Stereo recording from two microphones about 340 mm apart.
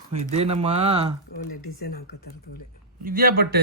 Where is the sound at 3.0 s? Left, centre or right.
Right.